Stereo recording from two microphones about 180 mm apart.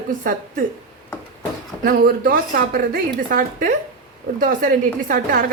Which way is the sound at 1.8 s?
50° right (ahead or behind).